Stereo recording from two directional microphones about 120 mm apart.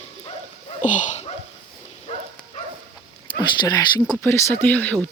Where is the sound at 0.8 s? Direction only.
90° left.